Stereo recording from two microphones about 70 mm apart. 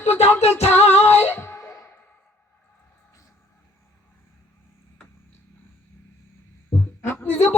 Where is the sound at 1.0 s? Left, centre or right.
Left.